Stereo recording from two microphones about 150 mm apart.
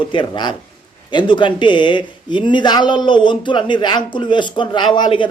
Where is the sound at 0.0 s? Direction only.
35° left (ahead or behind).